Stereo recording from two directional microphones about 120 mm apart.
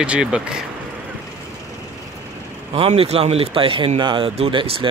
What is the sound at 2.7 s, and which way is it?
Speech, 55° right (ahead or behind).